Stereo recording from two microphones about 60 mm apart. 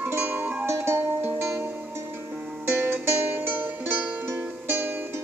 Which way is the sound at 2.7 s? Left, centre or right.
Right.